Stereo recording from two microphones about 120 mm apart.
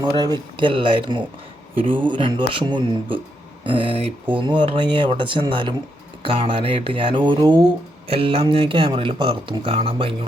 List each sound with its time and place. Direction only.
0.0 s speech: 35° right (ahead or behind)
8.0 s speech: 50° right (ahead or behind)